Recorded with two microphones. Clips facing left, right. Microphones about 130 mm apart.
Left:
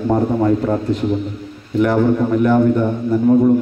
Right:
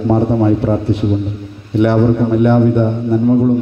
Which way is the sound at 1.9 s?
25° right (ahead or behind).